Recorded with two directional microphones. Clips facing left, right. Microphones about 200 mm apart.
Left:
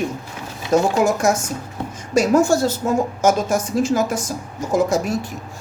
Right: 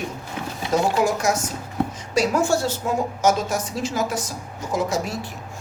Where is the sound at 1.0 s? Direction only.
45° left (ahead or behind).